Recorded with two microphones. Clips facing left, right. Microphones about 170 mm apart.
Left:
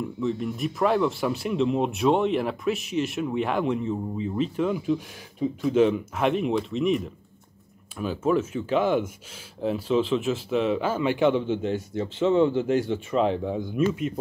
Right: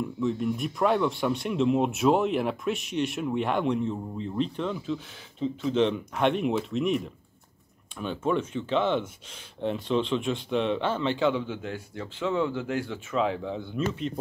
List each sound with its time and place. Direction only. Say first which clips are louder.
0.0 s speech: even; centre (ahead or behind)
11.2 s speech: left 5 dB; 20° left (ahead or behind)